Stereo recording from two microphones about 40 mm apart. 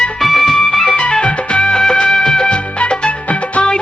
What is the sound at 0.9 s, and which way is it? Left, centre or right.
Music, left.